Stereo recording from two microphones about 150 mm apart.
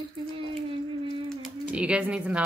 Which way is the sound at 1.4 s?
5° right (ahead or behind).